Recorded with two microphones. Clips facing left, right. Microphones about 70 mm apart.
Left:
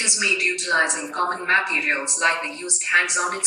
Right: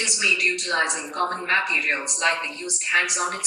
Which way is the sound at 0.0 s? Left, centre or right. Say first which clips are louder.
Even; left.